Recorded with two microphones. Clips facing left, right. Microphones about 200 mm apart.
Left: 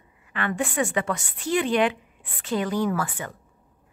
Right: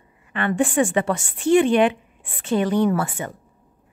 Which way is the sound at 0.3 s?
30° right (ahead or behind).